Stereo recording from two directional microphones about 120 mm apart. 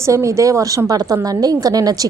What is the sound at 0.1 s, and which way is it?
A woman's voice, 25° right (ahead or behind).